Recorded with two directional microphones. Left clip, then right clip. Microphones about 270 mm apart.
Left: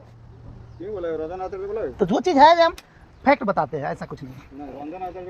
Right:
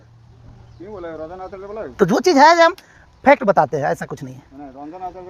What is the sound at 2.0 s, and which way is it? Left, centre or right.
Speech, right.